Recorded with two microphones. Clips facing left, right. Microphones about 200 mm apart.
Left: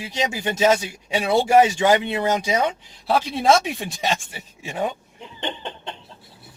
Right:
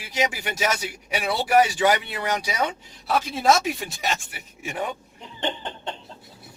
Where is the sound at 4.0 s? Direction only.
25° left (ahead or behind).